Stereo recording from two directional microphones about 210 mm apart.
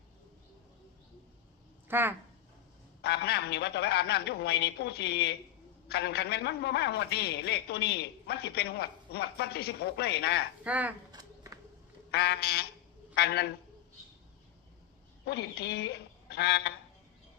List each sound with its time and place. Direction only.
1.9 s speech: 10° right (ahead or behind)
3.0 s a man's voice: 50° left (ahead or behind)
10.6 s speech: 5° right (ahead or behind)
11.1 s a sound: 15° right (ahead or behind)
12.1 s a man's voice: 50° left (ahead or behind)
15.2 s speech: 50° left (ahead or behind)